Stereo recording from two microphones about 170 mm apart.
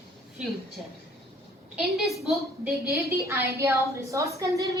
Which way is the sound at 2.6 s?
15° right (ahead or behind).